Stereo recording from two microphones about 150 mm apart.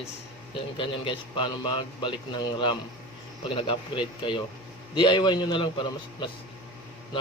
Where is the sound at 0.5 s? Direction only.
35° left (ahead or behind).